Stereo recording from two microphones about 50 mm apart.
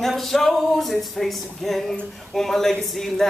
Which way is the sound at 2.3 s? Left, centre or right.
Centre.